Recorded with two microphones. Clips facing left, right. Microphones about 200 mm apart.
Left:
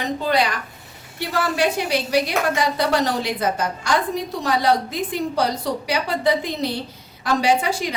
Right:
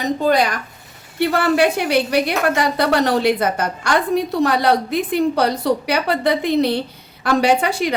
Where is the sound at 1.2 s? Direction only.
60° right (ahead or behind).